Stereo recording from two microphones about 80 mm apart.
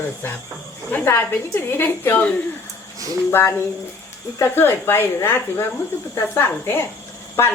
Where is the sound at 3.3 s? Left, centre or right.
Left.